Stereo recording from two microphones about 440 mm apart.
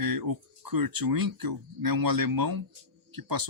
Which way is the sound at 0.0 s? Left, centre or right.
Right.